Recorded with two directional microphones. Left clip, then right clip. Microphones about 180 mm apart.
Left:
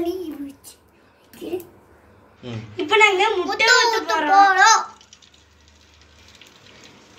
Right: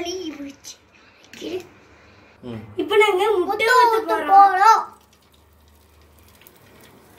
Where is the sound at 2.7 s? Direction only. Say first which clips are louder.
Left 1 dB; 30° right (ahead or behind).